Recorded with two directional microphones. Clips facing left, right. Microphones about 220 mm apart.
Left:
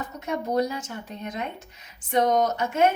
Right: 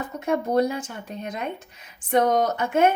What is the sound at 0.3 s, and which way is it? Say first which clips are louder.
A woman's voice: right 4 dB; 55° right (ahead or behind).